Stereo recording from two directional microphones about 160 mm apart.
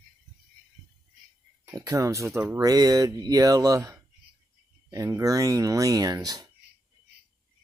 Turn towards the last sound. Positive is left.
turn(degrees=-20)  # may be behind; listen again after turning